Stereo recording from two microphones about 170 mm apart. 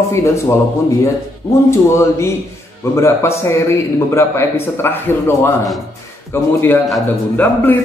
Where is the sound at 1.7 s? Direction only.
15° left (ahead or behind).